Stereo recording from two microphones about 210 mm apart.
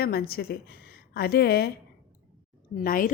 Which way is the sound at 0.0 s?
45° left (ahead or behind).